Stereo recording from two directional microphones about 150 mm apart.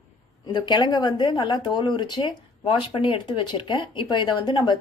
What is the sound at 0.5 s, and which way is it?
Speech, 30° left (ahead or behind).